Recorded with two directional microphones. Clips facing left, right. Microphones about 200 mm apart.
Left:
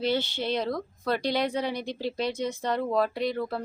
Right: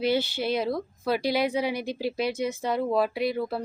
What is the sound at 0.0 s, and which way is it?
A woman's voice, 10° right (ahead or behind).